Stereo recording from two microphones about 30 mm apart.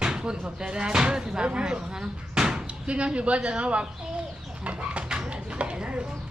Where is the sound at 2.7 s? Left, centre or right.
Right.